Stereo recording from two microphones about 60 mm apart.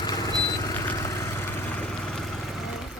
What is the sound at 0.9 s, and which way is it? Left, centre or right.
Vehicle, left.